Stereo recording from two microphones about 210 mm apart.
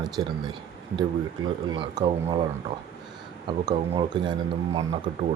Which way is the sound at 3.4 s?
20° right (ahead or behind).